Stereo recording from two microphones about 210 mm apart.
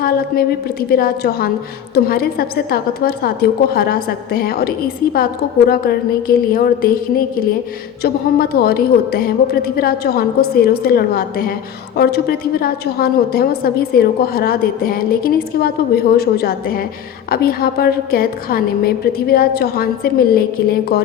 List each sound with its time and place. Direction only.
0.0 s a woman's voice: 45° left (ahead or behind)
8.0 s a woman's voice: 50° left (ahead or behind)